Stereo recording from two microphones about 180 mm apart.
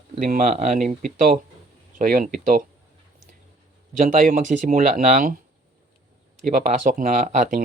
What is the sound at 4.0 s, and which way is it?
Speech, 45° right (ahead or behind).